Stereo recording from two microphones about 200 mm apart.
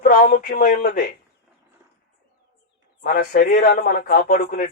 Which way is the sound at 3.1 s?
50° left (ahead or behind).